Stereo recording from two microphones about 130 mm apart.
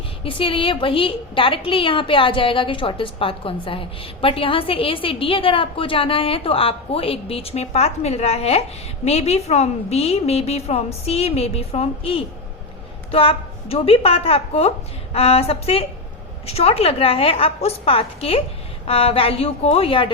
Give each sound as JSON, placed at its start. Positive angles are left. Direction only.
{"t": 0.3, "sound": "a woman's voice", "side_deg": 45}